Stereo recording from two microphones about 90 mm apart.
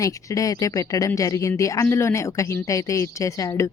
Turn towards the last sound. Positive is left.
turn(degrees=35)  # may be behind; listen again after turning